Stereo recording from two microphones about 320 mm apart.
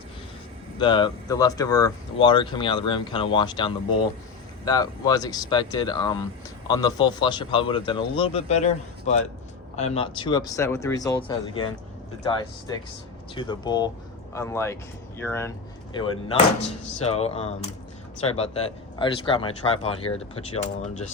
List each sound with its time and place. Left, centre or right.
0.8 s speech: centre